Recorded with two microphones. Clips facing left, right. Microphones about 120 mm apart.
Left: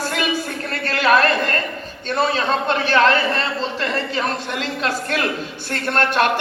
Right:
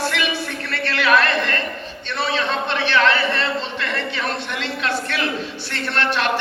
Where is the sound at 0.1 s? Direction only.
40° left (ahead or behind).